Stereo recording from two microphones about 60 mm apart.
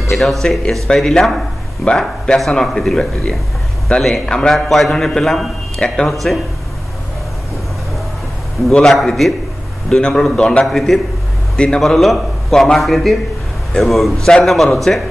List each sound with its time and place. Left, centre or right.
0.1 s a man's voice: centre
8.9 s a man's voice: centre
11.8 s a man's voice: centre